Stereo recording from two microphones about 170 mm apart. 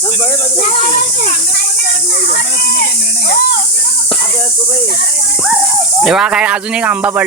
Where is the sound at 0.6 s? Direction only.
35° left (ahead or behind).